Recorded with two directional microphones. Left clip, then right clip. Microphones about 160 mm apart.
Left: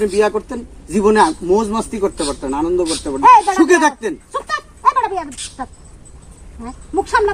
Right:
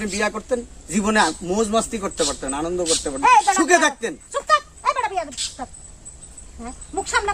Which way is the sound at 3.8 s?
20° right (ahead or behind).